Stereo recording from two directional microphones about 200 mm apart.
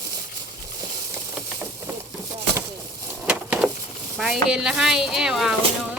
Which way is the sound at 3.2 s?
5° right (ahead or behind).